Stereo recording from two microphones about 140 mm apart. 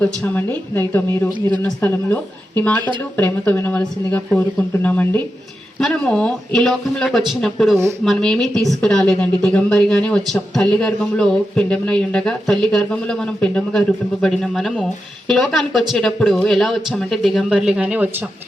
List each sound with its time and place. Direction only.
0.0 s a woman's voice: 10° left (ahead or behind); by 18.3 s 10° right (ahead or behind)